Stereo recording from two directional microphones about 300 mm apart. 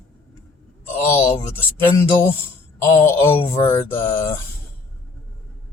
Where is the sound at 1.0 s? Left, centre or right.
Centre.